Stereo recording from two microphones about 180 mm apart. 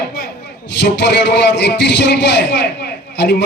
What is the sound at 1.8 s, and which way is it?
Speech, 70° left (ahead or behind).